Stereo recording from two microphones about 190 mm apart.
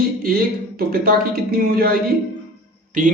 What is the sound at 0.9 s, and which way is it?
Speech, 50° right (ahead or behind).